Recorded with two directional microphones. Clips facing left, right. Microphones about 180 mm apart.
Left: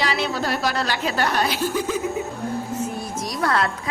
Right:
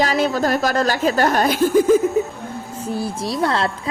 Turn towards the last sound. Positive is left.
turn(degrees=-25)  # may be behind; listen again after turning